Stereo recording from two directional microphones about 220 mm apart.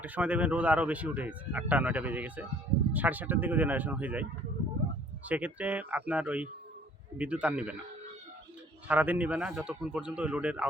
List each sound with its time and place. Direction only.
0.0 s speech: 5° right (ahead or behind)
5.3 s a man's voice: 5° right (ahead or behind)
8.9 s a man's voice: 5° right (ahead or behind)